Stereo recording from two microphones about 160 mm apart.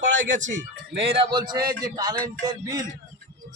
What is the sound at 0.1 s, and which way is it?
Speech, 55° right (ahead or behind).